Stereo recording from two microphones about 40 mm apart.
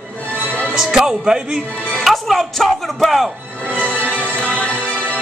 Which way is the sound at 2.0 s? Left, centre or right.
Centre.